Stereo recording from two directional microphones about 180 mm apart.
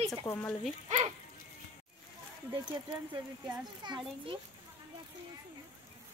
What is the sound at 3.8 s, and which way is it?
Speech, 25° right (ahead or behind).